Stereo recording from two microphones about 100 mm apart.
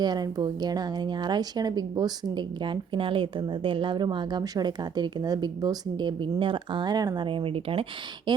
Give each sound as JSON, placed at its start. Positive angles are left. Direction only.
{"t": 0.0, "sound": "a woman's voice", "side_deg": -45}
{"t": 7.3, "sound": "speech", "side_deg": -60}